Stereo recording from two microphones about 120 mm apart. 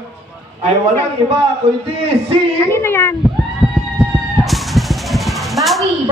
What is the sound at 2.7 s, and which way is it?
Speech, 20° left (ahead or behind).